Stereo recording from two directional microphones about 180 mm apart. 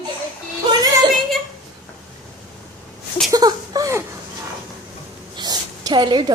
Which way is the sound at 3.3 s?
20° right (ahead or behind).